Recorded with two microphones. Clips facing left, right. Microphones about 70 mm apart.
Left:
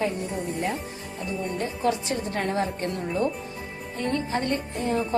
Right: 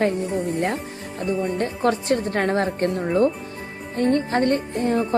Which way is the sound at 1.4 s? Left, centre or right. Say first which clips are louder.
Right 3 dB; right.